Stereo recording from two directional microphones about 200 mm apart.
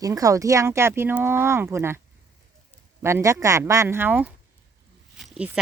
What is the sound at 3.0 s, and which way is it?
Speech, 15° right (ahead or behind).